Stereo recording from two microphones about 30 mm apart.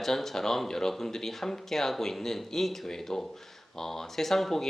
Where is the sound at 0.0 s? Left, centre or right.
Centre.